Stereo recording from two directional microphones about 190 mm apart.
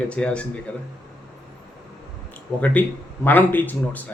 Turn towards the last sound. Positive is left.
turn(degrees=10)  # may be behind; listen again after turning